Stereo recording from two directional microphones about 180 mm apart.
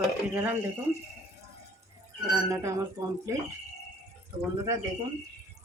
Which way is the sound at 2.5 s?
15° right (ahead or behind).